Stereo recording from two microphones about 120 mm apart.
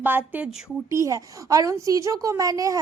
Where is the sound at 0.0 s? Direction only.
15° right (ahead or behind).